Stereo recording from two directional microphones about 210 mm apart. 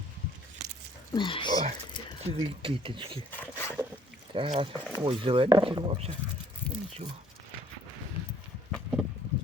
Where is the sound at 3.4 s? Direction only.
10° left (ahead or behind).